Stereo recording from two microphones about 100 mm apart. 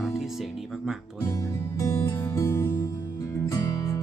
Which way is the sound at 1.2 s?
35° left (ahead or behind).